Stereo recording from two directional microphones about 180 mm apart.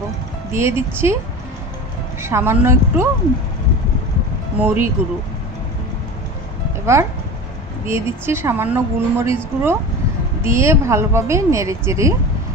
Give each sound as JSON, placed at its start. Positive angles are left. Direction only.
{"t": 0.5, "sound": "a woman's voice", "side_deg": -15}
{"t": 2.2, "sound": "a woman's voice", "side_deg": -15}
{"t": 4.6, "sound": "a woman's voice", "side_deg": -10}
{"t": 6.9, "sound": "a woman's voice", "side_deg": -15}